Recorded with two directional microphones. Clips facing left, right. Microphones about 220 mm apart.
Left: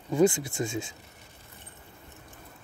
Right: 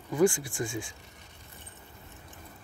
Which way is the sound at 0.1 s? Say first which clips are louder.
Left 2 dB; 20° left (ahead or behind).